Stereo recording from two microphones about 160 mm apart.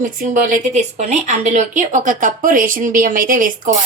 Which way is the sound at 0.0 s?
55° right (ahead or behind).